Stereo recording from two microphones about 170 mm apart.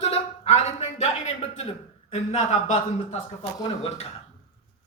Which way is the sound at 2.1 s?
45° left (ahead or behind).